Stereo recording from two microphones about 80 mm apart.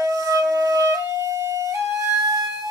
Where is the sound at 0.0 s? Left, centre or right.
Right.